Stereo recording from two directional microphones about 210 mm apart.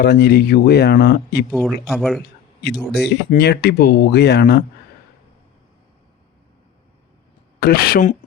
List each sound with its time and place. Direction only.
0.0 s speech: 50° left (ahead or behind)
1.5 s speech: centre (ahead or behind)
2.9 s speech: 50° left (ahead or behind)
7.6 s speech: 45° left (ahead or behind)